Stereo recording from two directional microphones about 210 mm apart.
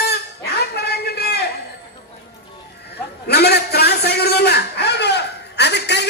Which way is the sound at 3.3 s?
50° left (ahead or behind).